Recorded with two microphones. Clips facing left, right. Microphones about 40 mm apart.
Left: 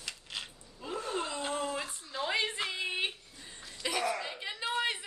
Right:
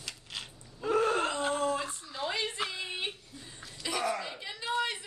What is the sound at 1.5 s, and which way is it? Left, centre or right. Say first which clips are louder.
A woman's voice: right 4 dB; centre.